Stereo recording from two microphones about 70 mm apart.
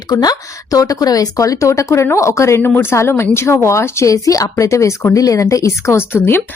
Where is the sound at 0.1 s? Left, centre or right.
Left.